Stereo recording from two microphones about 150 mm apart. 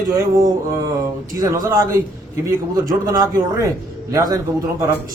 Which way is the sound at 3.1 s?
20° right (ahead or behind).